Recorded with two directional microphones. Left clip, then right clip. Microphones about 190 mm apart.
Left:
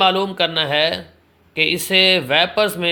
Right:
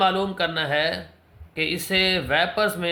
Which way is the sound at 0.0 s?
30° left (ahead or behind).